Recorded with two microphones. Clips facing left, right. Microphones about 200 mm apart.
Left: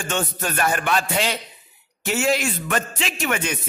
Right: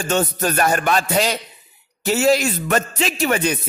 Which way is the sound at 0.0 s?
40° right (ahead or behind).